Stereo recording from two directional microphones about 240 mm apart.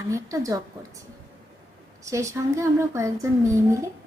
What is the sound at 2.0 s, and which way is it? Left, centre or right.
Speech, centre.